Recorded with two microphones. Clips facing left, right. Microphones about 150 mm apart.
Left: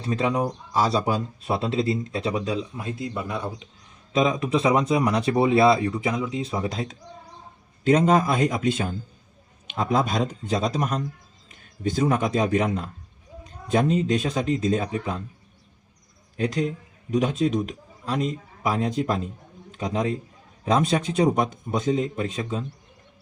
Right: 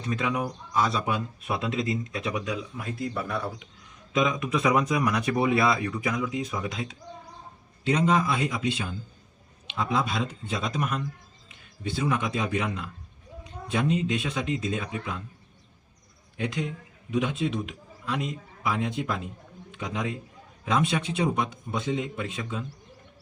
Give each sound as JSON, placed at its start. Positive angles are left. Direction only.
{"t": 0.0, "sound": "speech", "side_deg": 30}
{"t": 4.1, "sound": "a man's voice", "side_deg": 30}
{"t": 16.4, "sound": "a man's voice", "side_deg": 35}